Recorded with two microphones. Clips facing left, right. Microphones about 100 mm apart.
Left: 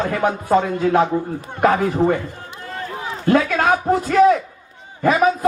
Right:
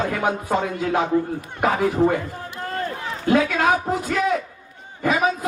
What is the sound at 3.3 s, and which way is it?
Speech, 45° left (ahead or behind).